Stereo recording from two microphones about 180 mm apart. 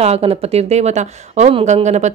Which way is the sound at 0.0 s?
35° right (ahead or behind).